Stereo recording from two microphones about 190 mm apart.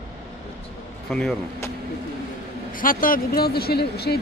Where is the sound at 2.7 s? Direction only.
45° left (ahead or behind).